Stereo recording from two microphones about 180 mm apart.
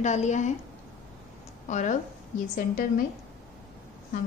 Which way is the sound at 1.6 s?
40° left (ahead or behind).